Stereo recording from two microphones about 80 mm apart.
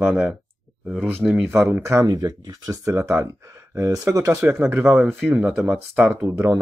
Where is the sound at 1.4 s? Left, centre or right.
Right.